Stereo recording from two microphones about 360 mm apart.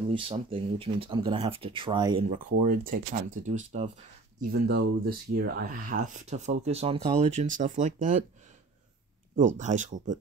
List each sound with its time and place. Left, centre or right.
0.1 s speech: centre
9.3 s speech: right